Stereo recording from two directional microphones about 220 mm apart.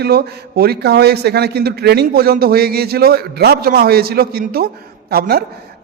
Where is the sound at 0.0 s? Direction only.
45° right (ahead or behind).